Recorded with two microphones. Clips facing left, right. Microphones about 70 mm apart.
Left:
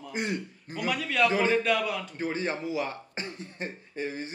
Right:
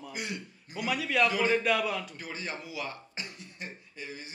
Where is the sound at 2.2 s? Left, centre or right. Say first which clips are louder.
Left 8 dB; left.